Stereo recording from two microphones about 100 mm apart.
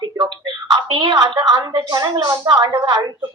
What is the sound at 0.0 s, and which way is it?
A woman's voice, 50° right (ahead or behind).